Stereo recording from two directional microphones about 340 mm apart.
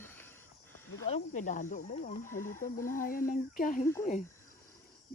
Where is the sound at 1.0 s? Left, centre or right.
Left.